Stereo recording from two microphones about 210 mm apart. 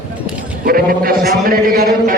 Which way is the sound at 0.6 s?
45° right (ahead or behind).